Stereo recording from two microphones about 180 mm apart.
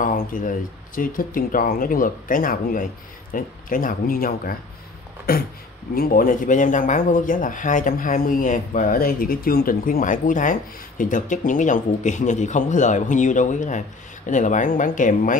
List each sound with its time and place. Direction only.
0.0 s speech: 50° left (ahead or behind)